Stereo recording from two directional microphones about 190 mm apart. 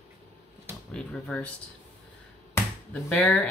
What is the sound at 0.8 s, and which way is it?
Speech, 5° left (ahead or behind).